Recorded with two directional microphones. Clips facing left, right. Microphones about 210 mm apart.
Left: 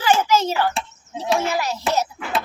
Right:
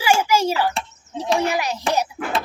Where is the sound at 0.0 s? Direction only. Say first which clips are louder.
Even; 10° right (ahead or behind).